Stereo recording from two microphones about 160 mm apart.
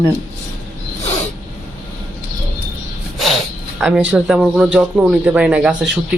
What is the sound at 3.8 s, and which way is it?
Speech, 5° right (ahead or behind).